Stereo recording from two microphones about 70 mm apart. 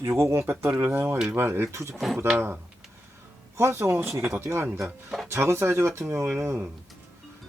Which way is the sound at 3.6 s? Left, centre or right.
Right.